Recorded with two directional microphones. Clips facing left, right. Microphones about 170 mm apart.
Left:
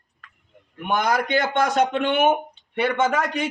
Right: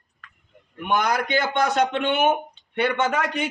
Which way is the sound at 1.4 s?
10° left (ahead or behind).